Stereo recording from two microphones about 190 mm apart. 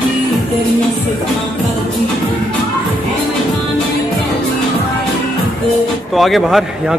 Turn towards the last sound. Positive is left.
turn(degrees=0)  # may be behind; listen again after turning